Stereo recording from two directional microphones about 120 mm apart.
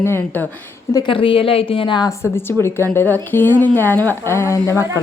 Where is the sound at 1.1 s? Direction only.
45° left (ahead or behind).